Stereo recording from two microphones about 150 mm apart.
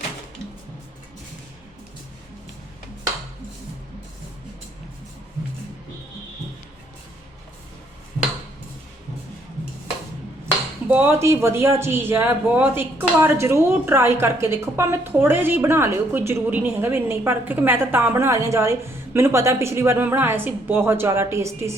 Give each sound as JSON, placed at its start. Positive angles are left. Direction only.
{"t": 10.8, "sound": "speech", "side_deg": -15}